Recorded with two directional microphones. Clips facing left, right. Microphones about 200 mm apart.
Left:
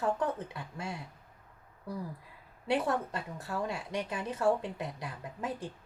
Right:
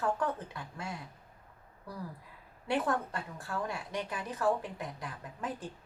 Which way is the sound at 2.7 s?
20° left (ahead or behind).